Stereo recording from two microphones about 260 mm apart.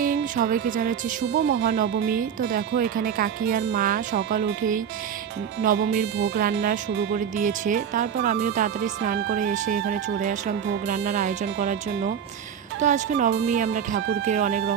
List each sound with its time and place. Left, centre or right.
0.0 s speech: right